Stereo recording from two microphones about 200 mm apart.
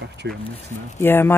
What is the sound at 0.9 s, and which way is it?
Speech, 10° left (ahead or behind).